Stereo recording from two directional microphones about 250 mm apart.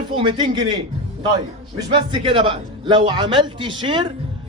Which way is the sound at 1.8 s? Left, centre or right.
Centre.